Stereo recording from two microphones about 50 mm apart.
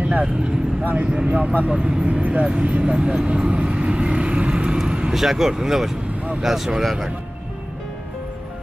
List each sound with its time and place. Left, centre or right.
0.0 s speech: right
5.1 s speech: centre